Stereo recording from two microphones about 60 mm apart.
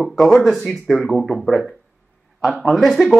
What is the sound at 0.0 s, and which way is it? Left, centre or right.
Speech, centre.